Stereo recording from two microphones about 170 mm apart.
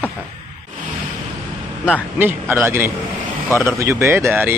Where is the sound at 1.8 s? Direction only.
10° right (ahead or behind).